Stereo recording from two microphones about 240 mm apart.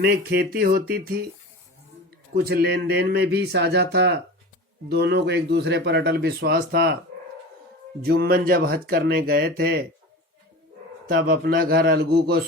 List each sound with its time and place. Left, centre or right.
0.0 s speech: right
2.3 s speech: right
8.0 s speech: right
11.1 s speech: right